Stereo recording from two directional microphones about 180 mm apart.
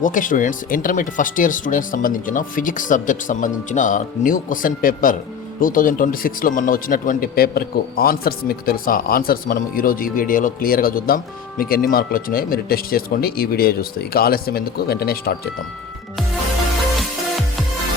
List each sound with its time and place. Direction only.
0.0 s speech: 45° left (ahead or behind)